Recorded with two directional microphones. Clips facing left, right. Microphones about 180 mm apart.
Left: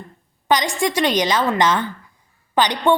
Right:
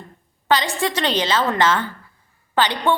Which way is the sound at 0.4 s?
15° left (ahead or behind).